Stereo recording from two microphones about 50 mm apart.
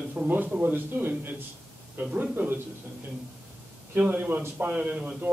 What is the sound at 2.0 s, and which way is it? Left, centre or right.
Speech, right.